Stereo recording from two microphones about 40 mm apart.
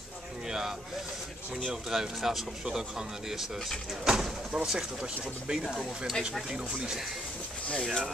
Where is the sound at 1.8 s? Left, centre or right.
Centre.